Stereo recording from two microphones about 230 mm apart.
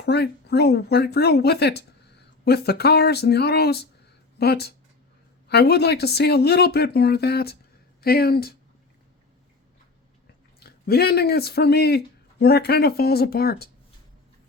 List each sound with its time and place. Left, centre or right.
0.0 s speech: left
10.6 s speech: left